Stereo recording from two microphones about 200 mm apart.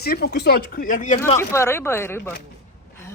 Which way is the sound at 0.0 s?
50° left (ahead or behind).